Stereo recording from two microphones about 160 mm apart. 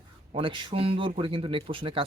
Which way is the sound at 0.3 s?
30° right (ahead or behind).